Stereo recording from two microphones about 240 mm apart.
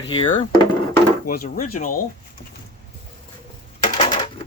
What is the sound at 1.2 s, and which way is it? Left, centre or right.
Speech, left.